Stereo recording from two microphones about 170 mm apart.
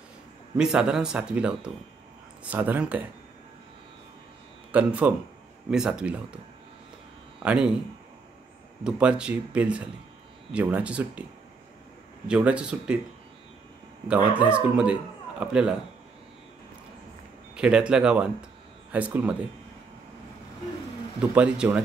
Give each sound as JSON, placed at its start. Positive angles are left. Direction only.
{"t": 0.6, "sound": "speech", "side_deg": -5}
{"t": 4.7, "sound": "speech", "side_deg": -10}
{"t": 7.4, "sound": "speech", "side_deg": -5}
{"t": 8.8, "sound": "speech", "side_deg": -5}
{"t": 12.3, "sound": "speech", "side_deg": -5}
{"t": 14.0, "sound": "speech", "side_deg": -10}
{"t": 17.6, "sound": "speech", "side_deg": -5}
{"t": 21.2, "sound": "speech", "side_deg": -5}